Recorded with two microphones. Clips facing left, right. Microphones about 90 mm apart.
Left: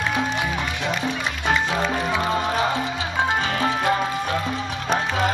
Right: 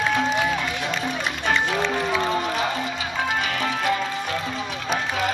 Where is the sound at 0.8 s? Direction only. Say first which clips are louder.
Left 1 dB; 15° left (ahead or behind).